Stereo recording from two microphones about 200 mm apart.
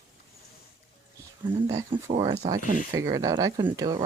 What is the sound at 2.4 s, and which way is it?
Speech, 20° right (ahead or behind).